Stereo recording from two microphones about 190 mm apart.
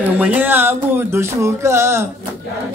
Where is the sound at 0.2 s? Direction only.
10° right (ahead or behind).